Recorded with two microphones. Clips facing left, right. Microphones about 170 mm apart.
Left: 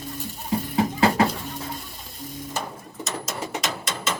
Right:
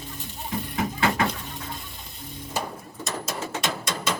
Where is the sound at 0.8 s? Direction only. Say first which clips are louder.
Left 5 dB; 35° left (ahead or behind).